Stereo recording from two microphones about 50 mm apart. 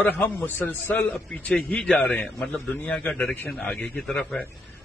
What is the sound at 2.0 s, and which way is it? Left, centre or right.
Speech, left.